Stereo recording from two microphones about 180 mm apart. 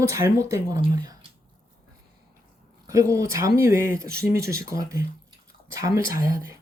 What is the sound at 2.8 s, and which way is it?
Speech, 15° right (ahead or behind).